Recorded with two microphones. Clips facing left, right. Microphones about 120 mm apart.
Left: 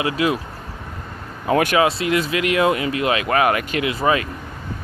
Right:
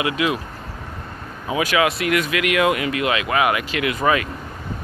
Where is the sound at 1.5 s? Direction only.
60° left (ahead or behind).